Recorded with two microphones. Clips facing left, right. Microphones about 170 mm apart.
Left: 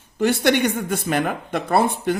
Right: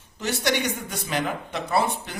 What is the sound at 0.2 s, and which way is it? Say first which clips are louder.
A man's voice: left 8 dB; 55° left (ahead or behind).